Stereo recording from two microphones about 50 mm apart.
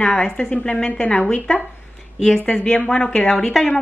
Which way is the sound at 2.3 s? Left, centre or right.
Centre.